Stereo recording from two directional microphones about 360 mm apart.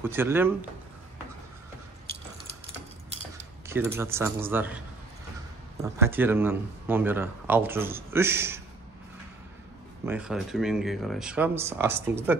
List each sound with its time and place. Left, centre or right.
0.0 s speech: centre
3.6 s a man's voice: centre
10.0 s a man's voice: centre